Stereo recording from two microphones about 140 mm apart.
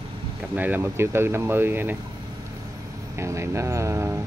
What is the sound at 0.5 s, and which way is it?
Speech, 10° right (ahead or behind).